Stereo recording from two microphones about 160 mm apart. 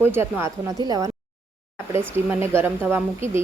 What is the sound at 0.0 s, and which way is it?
A woman's voice, 15° right (ahead or behind).